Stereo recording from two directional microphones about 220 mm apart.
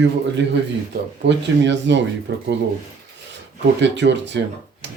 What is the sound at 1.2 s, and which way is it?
Speech, 55° right (ahead or behind).